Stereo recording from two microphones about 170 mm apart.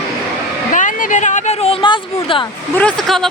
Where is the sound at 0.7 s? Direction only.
50° left (ahead or behind); by 2.4 s 30° left (ahead or behind).